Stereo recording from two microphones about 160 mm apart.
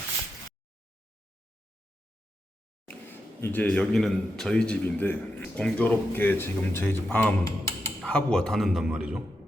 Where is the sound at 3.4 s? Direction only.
10° left (ahead or behind); by 9.2 s 5° right (ahead or behind).